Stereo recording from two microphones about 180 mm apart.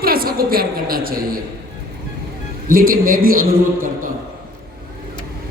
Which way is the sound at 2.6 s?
50° right (ahead or behind).